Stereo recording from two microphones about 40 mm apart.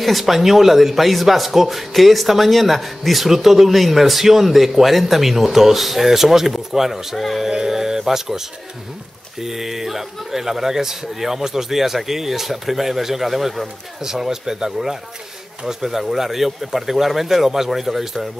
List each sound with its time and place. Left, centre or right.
0.0 s a man's voice: centre